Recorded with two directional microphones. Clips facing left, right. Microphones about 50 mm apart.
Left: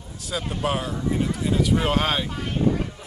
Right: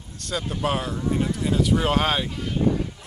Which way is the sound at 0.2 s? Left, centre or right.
Centre.